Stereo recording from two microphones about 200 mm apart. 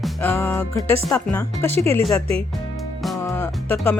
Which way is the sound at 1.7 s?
30° right (ahead or behind).